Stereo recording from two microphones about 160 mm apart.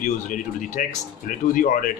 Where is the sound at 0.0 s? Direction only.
50° left (ahead or behind).